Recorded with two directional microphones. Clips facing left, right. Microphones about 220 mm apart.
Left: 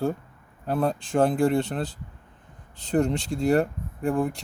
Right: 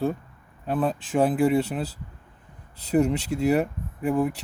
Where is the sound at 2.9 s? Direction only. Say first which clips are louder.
Right 2 dB; 5° right (ahead or behind).